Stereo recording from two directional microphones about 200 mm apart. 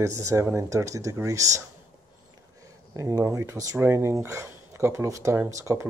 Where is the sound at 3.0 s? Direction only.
15° right (ahead or behind).